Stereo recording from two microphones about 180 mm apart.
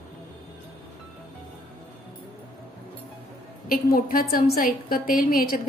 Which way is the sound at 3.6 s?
55° left (ahead or behind).